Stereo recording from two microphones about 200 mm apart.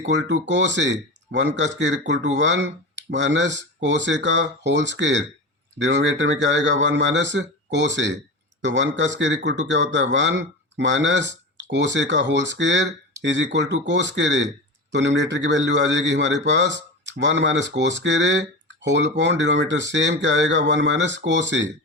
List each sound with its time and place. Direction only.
0.1 s a man's voice: 60° right (ahead or behind)